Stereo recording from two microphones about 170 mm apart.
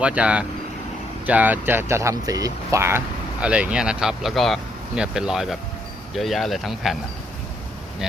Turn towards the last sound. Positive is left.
turn(degrees=0)  # may be behind; listen again after turning